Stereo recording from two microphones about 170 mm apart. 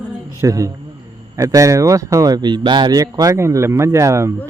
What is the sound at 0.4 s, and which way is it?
Speech, 20° right (ahead or behind).